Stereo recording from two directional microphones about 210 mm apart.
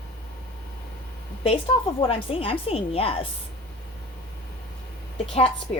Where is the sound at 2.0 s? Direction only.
25° left (ahead or behind).